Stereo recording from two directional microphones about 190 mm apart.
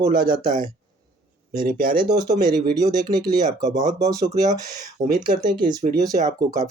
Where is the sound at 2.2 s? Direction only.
20° right (ahead or behind).